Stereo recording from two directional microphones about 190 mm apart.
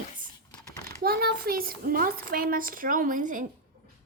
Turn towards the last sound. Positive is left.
turn(degrees=-45)  # may be behind; listen again after turning